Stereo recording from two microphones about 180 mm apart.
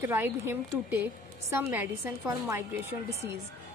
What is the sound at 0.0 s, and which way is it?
A woman's voice, 10° right (ahead or behind).